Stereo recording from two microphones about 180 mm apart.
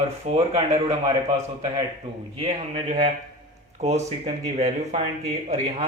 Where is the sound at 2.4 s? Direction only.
35° right (ahead or behind).